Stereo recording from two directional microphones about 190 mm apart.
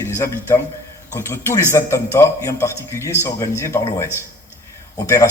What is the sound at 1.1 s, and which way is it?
A man's voice, 15° left (ahead or behind).